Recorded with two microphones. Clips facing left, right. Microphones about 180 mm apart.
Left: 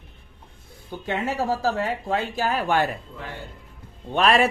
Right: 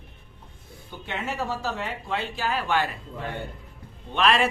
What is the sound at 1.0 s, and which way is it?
Speech, 40° left (ahead or behind).